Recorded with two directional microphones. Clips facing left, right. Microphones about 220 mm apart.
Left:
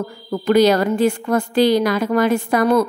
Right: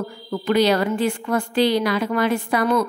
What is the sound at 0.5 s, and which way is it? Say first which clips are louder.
A woman's voice: left 4 dB; 45° left (ahead or behind).